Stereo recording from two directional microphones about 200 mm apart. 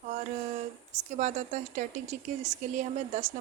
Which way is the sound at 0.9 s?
35° right (ahead or behind).